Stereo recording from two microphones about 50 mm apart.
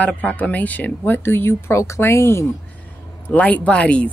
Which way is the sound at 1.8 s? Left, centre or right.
Left.